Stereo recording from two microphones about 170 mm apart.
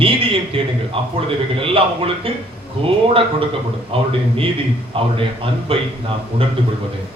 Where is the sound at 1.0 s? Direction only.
35° right (ahead or behind).